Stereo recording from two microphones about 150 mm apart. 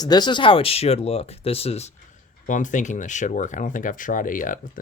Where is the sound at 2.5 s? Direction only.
55° left (ahead or behind).